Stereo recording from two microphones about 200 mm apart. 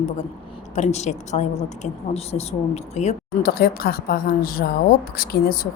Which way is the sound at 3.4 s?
50° left (ahead or behind).